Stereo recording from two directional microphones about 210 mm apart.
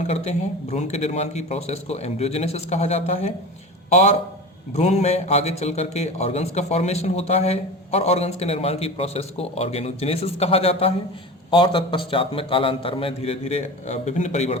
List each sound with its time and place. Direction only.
0.0 s a man's voice: 30° left (ahead or behind)
4.7 s a man's voice: 30° left (ahead or behind)